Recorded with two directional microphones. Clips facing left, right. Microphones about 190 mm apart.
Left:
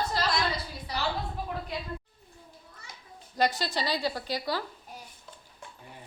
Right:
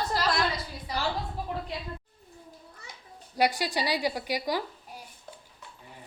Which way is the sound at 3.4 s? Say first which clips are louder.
Right 1 dB; 10° right (ahead or behind).